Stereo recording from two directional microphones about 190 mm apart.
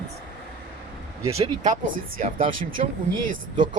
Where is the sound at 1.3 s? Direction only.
35° right (ahead or behind).